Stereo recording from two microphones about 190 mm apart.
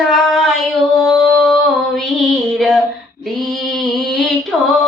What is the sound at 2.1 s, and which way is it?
Music, centre (ahead or behind).